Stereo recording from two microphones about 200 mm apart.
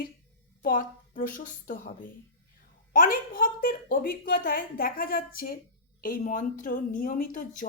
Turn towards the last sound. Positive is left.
turn(degrees=40)  # may be behind; listen again after turning